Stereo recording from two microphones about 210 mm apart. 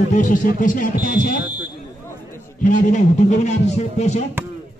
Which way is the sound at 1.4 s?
5° right (ahead or behind).